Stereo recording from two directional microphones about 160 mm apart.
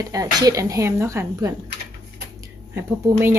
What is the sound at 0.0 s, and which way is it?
Speech, 20° right (ahead or behind).